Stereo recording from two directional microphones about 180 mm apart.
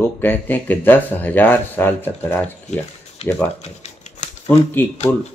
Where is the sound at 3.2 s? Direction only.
30° left (ahead or behind).